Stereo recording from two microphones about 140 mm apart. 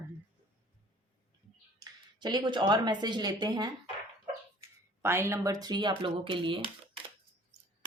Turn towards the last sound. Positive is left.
turn(degrees=-35)  # may be behind; listen again after turning